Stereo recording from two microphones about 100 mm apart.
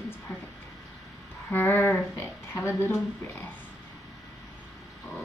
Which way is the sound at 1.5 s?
20° left (ahead or behind).